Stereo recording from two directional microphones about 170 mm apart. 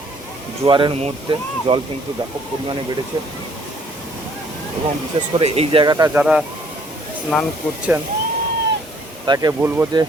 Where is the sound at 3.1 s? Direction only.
30° right (ahead or behind).